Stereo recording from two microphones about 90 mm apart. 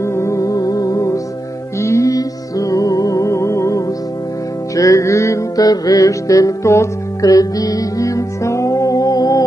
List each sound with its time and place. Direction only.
0.0 s music: 30° left (ahead or behind)